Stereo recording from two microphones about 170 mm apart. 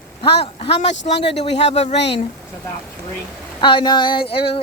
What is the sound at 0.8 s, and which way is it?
Speech, 90° left.